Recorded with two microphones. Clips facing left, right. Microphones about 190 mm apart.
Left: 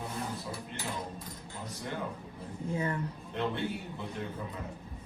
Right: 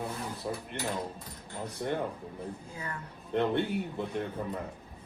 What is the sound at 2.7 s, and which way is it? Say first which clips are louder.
Speech: left 8 dB; 20° left (ahead or behind).